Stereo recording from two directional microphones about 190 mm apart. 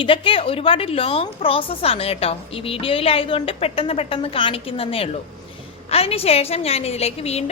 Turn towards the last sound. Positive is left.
turn(degrees=30)  # may be behind; listen again after turning